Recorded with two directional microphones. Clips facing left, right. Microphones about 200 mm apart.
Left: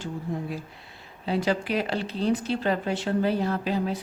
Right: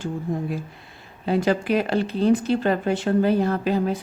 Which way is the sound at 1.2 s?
50° right (ahead or behind).